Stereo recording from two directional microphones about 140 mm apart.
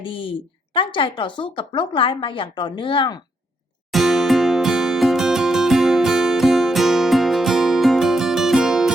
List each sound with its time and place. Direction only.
0.0 s speech: 35° left (ahead or behind)
3.9 s music: centre (ahead or behind)